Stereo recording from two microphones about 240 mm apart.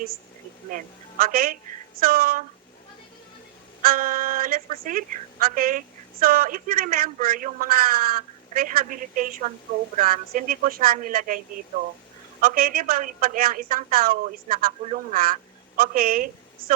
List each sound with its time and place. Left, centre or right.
0.7 s a woman's voice: right
3.8 s a woman's voice: right
12.4 s a woman's voice: right